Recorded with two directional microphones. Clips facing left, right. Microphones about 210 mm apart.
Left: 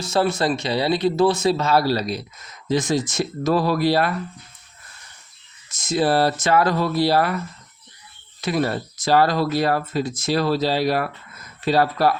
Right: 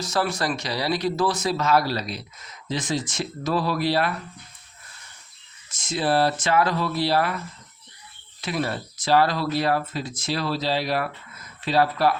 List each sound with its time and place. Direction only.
0.0 s speech: 25° left (ahead or behind); by 4.1 s 45° left (ahead or behind)
5.7 s speech: 40° left (ahead or behind)
8.4 s speech: 40° left (ahead or behind)